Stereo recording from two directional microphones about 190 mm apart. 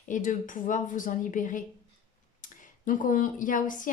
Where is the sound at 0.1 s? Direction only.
45° left (ahead or behind).